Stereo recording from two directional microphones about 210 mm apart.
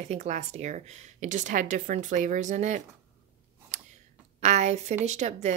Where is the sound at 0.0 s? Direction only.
35° right (ahead or behind).